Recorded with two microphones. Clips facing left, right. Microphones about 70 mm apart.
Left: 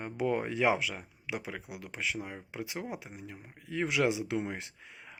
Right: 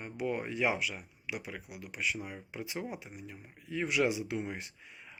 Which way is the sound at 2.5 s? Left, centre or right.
Left.